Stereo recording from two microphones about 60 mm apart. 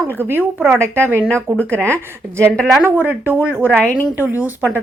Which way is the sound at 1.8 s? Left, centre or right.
Right.